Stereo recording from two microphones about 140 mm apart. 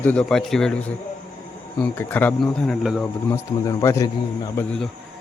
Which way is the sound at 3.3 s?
25° left (ahead or behind).